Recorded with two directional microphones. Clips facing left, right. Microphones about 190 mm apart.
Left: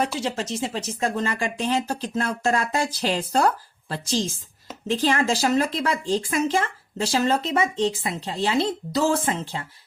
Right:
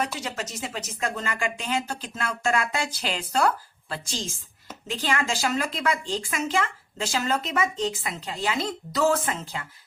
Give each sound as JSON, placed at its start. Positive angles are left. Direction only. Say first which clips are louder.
{"t": 0.2, "sound": "speech", "louder": "left 6 dB", "side_deg": 30}